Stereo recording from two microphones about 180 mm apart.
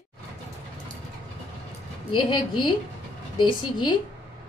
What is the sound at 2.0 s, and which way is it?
A woman's voice, 25° left (ahead or behind).